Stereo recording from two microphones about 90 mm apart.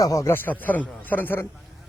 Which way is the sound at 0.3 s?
20° left (ahead or behind).